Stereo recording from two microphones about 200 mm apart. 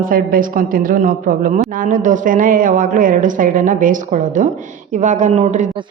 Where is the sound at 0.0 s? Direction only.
45° right (ahead or behind).